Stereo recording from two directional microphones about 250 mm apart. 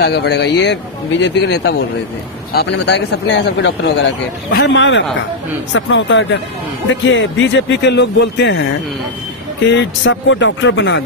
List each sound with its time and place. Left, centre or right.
0.0 s speech: left
9.7 s speech: left